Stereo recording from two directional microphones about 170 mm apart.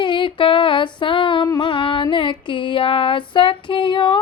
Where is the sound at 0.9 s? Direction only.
30° left (ahead or behind).